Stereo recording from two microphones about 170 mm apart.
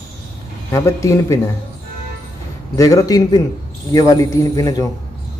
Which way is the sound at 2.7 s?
20° left (ahead or behind).